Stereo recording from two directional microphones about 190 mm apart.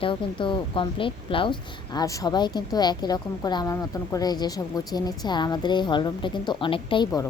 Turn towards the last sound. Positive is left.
turn(degrees=25)  # may be behind; listen again after turning